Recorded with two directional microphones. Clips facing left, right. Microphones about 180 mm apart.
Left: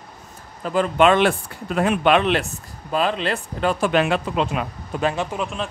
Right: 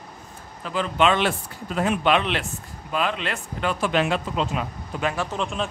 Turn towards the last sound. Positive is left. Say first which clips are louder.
# left 1 dB
turn(degrees=5)  # may be behind; listen again after turning